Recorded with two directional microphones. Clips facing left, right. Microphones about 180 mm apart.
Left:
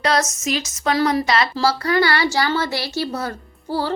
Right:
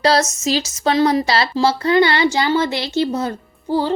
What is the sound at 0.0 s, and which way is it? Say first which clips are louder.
A woman's voice: right 4 dB; 30° right (ahead or behind).